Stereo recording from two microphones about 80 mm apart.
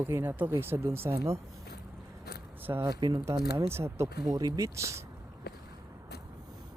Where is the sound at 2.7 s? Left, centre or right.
Right.